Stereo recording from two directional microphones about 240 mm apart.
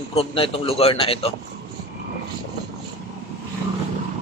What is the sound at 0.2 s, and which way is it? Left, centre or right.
A man's voice, left.